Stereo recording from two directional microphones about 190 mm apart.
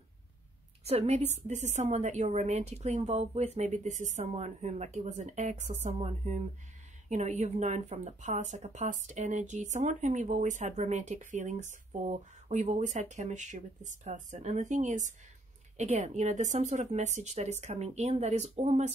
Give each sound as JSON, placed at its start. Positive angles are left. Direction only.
{"t": 0.8, "sound": "speech", "side_deg": -35}